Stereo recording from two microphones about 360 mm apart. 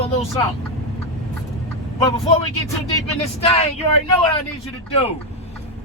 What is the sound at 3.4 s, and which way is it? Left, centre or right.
Speech, centre.